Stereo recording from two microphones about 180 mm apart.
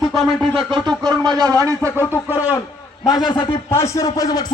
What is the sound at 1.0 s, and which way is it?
Speech, 20° right (ahead or behind).